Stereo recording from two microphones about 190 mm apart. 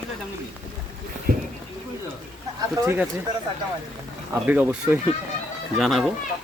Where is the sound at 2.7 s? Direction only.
10° right (ahead or behind).